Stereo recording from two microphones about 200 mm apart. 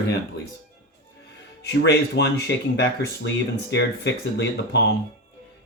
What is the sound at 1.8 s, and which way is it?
Speech, 55° left (ahead or behind).